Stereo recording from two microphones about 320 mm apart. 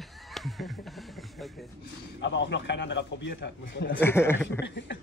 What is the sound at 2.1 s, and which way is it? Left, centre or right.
A man's voice, left.